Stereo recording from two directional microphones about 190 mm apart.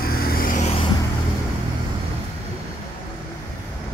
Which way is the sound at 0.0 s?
50° left (ahead or behind).